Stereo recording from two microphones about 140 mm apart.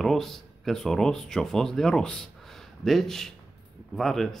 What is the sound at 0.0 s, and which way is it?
Speech, centre (ahead or behind).